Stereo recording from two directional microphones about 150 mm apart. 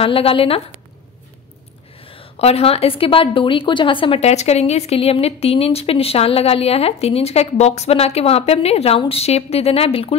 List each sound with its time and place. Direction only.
0.0 s a woman's voice: 35° left (ahead or behind)
2.0 s a woman's voice: 40° left (ahead or behind)